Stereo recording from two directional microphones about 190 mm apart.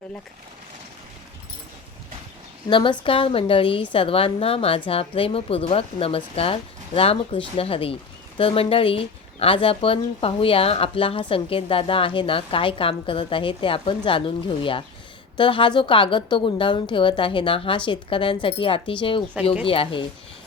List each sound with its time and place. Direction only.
2.6 s speech: 25° left (ahead or behind)